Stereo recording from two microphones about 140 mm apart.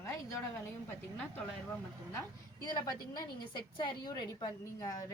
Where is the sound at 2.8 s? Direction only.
30° left (ahead or behind).